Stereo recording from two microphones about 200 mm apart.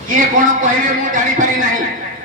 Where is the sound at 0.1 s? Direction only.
40° right (ahead or behind).